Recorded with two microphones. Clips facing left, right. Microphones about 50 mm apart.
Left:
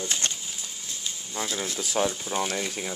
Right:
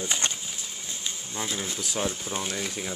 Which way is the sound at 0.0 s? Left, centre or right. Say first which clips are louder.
Right 1 dB; centre.